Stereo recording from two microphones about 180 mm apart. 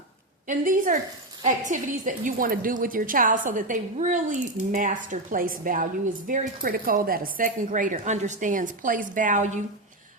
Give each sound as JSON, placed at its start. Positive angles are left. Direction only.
{"t": 0.4, "sound": "a woman's voice", "side_deg": -45}